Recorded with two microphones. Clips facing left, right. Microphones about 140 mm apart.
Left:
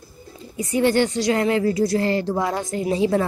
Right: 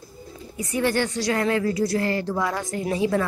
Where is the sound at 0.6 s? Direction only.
25° left (ahead or behind).